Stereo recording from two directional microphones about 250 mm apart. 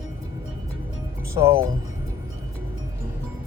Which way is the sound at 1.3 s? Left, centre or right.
Centre.